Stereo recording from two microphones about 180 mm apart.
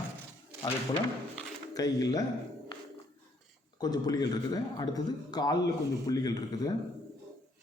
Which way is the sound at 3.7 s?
20° left (ahead or behind).